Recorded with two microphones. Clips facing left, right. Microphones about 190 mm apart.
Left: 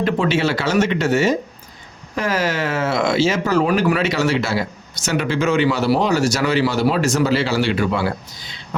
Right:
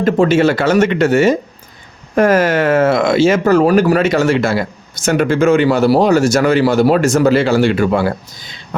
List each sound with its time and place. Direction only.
0.0 s speech: 45° right (ahead or behind)